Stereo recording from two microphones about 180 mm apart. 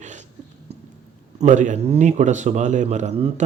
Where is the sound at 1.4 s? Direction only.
45° right (ahead or behind).